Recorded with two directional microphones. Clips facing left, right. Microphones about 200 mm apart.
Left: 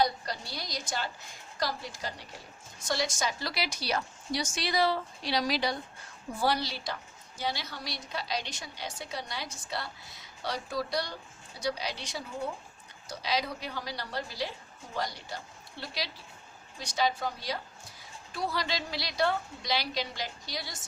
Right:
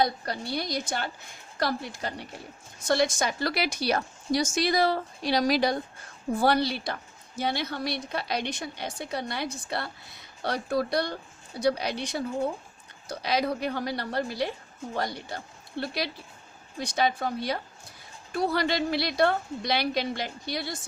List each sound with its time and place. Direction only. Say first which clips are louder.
0.0 s a woman's voice: right 2 dB; 55° right (ahead or behind)